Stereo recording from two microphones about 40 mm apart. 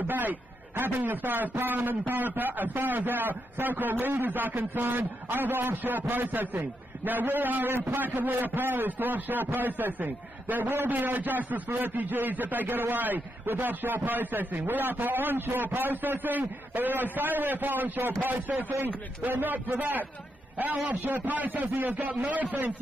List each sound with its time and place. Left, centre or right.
0.0 s a man's voice: right